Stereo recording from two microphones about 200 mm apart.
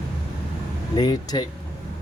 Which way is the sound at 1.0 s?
20° left (ahead or behind).